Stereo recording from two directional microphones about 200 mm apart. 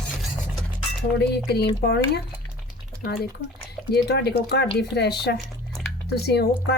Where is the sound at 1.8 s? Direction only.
55° left (ahead or behind).